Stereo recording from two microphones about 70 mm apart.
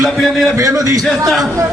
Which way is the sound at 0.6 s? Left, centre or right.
Right.